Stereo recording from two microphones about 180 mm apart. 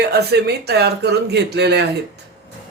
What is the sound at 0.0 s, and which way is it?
A man's voice, 65° right (ahead or behind).